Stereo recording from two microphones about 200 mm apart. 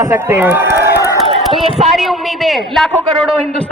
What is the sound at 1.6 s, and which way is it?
Speech, 30° right (ahead or behind).